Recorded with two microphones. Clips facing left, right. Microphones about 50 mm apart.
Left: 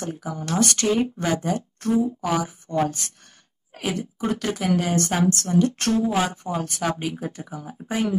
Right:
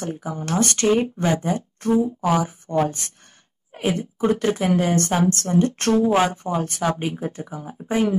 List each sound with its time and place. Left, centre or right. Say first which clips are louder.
0.0 s speech: right 2 dB; right